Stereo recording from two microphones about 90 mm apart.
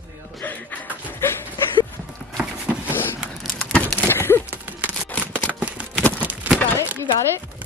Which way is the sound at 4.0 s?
25° left (ahead or behind).